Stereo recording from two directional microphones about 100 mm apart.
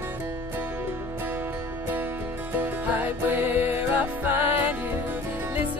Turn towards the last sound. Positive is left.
turn(degrees=-20)  # may be behind; listen again after turning